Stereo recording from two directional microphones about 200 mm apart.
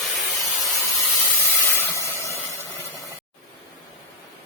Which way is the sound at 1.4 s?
10° left (ahead or behind).